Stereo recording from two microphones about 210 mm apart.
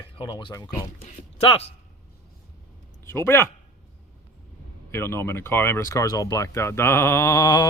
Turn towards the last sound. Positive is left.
turn(degrees=15)  # may be behind; listen again after turning